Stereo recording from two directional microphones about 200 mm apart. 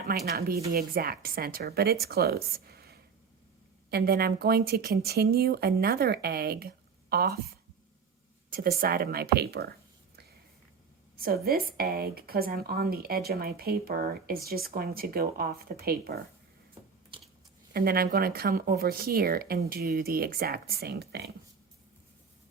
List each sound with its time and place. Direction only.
0.3 s a woman's voice: 50° right (ahead or behind)
11.2 s a woman's voice: 50° right (ahead or behind)
17.1 s a sound: 25° right (ahead or behind)
17.7 s a woman's voice: 50° right (ahead or behind)